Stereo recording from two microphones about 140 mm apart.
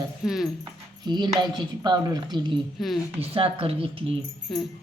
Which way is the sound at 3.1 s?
45° right (ahead or behind).